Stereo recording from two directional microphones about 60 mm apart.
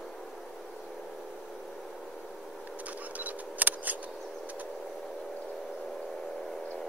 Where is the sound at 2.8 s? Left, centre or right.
Right.